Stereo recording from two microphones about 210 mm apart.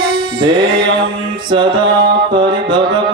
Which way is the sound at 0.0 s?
20° right (ahead or behind).